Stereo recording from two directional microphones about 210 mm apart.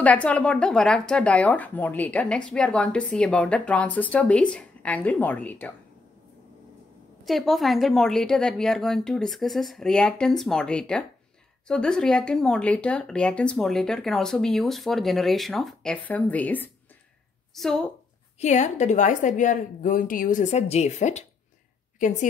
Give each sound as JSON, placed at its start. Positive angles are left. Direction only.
{"t": 0.0, "sound": "speech", "side_deg": 5}
{"t": 7.2, "sound": "speech", "side_deg": 0}
{"t": 18.4, "sound": "a woman's voice", "side_deg": 35}